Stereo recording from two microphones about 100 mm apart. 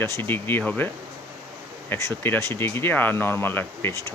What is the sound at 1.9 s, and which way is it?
Speech, 20° left (ahead or behind).